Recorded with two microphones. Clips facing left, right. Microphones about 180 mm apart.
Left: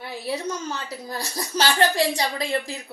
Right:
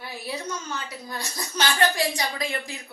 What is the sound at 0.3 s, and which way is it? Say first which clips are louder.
A woman's voice: left 5 dB; 35° left (ahead or behind).